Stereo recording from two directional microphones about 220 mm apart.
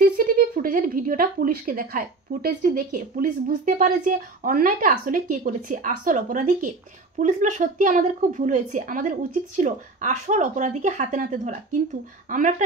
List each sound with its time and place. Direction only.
0.0 s speech: 40° right (ahead or behind)